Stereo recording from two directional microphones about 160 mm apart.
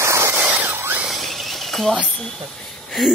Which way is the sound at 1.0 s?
Centre (ahead or behind).